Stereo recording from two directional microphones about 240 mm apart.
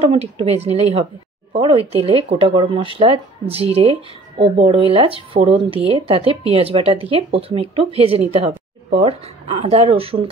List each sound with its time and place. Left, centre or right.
0.0 s speech: right